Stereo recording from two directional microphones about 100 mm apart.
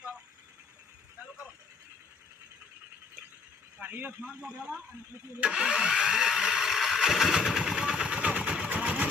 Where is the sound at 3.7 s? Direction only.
20° right (ahead or behind).